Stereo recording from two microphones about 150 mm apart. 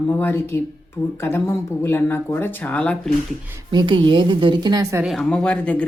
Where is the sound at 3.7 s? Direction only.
30° right (ahead or behind).